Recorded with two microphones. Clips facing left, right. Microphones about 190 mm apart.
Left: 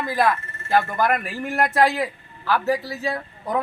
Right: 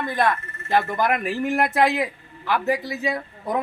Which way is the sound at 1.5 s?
20° right (ahead or behind).